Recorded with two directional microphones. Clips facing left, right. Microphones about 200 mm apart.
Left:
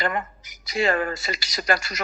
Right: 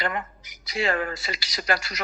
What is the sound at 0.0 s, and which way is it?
Speech, 45° left (ahead or behind).